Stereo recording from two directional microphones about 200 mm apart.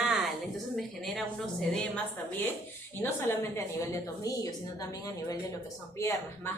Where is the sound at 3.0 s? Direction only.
10° left (ahead or behind).